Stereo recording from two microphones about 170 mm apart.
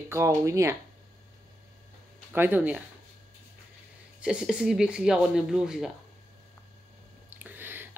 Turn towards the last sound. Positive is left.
turn(degrees=-10)  # may be behind; listen again after turning